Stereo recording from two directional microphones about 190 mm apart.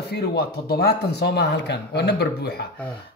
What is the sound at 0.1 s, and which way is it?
A man's voice, 60° left (ahead or behind).